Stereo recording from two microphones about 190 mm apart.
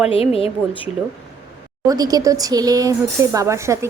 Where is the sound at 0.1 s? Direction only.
30° left (ahead or behind).